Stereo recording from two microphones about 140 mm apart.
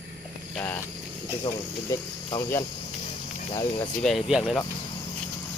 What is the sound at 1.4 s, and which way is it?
Speech, 30° left (ahead or behind).